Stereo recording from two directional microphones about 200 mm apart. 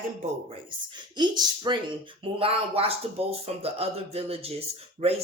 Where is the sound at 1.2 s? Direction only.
20° right (ahead or behind).